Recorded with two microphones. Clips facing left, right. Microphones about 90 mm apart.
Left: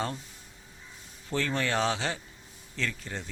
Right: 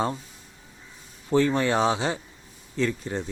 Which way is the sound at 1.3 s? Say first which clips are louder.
Right 8 dB; 20° right (ahead or behind).